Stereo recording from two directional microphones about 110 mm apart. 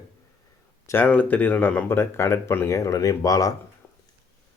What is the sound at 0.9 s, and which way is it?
Speech, 20° left (ahead or behind).